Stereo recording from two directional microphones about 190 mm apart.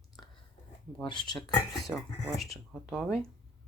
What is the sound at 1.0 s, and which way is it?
Speech, 25° left (ahead or behind).